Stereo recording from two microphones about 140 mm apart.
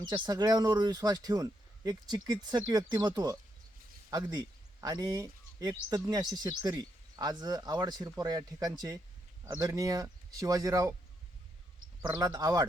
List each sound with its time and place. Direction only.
0.1 s speech: 25° right (ahead or behind)
9.4 s speech: 15° right (ahead or behind)
9.6 s speech: 25° right (ahead or behind)
12.0 s speech: 25° right (ahead or behind)